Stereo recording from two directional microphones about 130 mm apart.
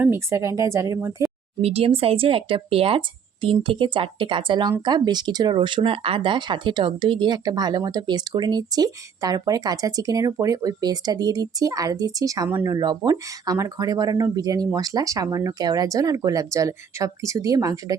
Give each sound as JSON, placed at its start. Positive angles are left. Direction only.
{"t": 0.0, "sound": "speech", "side_deg": -20}
{"t": 1.2, "sound": "a sound", "side_deg": -25}
{"t": 1.6, "sound": "speech", "side_deg": -50}